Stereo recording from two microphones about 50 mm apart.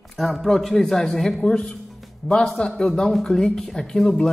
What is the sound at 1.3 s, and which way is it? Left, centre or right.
Speech, centre.